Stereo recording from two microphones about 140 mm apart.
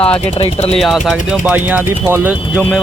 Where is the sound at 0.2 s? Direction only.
45° left (ahead or behind).